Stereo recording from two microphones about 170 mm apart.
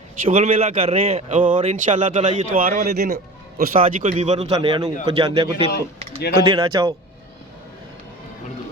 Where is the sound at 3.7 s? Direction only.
50° right (ahead or behind).